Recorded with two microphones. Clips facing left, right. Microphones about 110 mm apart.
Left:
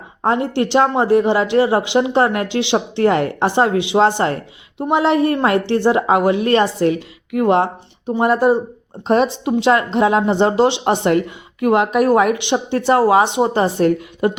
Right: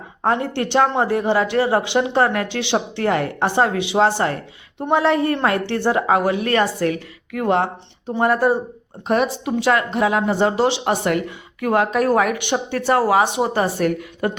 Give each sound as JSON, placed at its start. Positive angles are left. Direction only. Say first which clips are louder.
{"t": 0.3, "sound": "a woman's voice", "louder": "left 3 dB", "side_deg": 20}
{"t": 4.8, "sound": "a woman's voice", "louder": "left 2 dB", "side_deg": 15}